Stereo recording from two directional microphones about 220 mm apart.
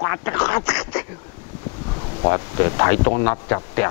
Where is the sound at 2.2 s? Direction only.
20° left (ahead or behind).